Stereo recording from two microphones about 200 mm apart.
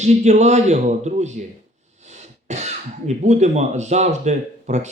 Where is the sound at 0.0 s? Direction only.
35° right (ahead or behind).